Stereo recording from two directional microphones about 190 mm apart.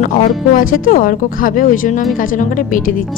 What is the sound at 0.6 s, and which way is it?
A woman's voice, 45° left (ahead or behind).